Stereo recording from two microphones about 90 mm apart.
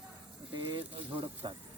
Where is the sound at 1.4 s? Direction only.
55° right (ahead or behind).